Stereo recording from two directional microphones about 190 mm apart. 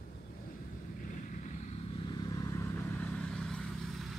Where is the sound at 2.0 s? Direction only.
20° left (ahead or behind); by 3.6 s centre (ahead or behind).